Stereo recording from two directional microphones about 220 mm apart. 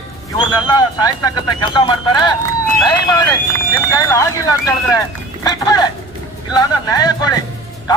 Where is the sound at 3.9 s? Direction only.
15° left (ahead or behind).